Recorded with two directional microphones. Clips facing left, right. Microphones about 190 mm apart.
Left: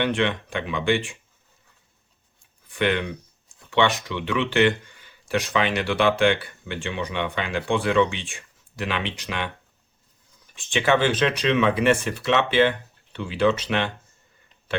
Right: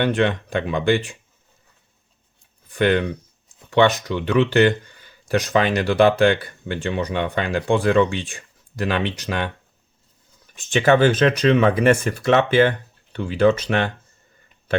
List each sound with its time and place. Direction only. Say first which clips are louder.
0.0 s speech: right 4 dB; 40° right (ahead or behind)
2.6 s speech: right 5 dB; 40° right (ahead or behind)
10.5 s speech: right 5 dB; 45° right (ahead or behind)